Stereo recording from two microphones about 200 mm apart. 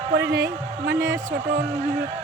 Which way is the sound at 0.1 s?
55° right (ahead or behind).